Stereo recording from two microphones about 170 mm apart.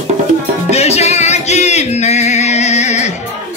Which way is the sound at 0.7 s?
40° left (ahead or behind).